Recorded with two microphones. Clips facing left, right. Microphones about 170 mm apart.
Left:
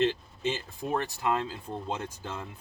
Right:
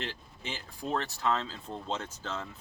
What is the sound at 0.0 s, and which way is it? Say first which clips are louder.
Speech: left 13 dB; 20° left (ahead or behind).